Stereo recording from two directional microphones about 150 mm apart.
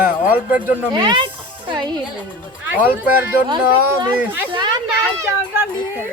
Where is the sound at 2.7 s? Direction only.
10° right (ahead or behind).